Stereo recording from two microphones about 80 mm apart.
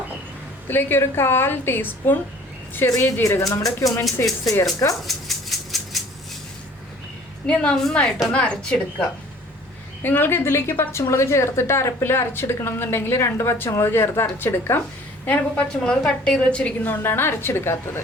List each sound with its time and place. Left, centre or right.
0.7 s a woman's voice: left
3.2 s a woman's voice: left
5.0 s a sound: centre
7.4 s a woman's voice: centre
10.0 s a woman's voice: left
15.9 s a woman's voice: centre
16.9 s a woman's voice: left